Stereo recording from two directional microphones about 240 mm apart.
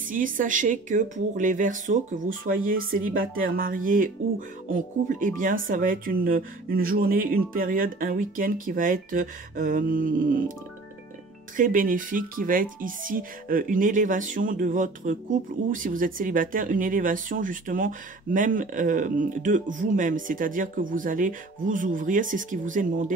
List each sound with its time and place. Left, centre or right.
0.1 s speech: right
11.5 s speech: right